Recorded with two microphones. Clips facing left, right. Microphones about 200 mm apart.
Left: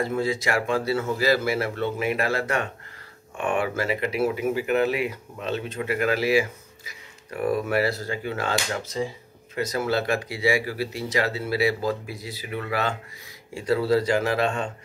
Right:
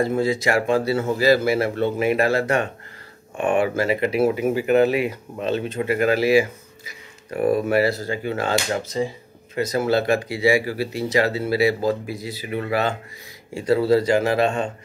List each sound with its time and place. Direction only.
0.1 s speech: 30° right (ahead or behind)